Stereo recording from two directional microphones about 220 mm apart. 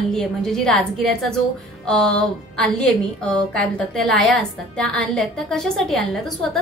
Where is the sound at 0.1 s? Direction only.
Centre (ahead or behind).